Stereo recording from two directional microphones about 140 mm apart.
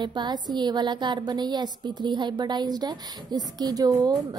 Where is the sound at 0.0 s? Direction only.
30° right (ahead or behind).